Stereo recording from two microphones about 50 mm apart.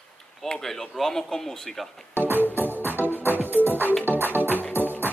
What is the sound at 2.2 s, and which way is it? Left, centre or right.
Music, right.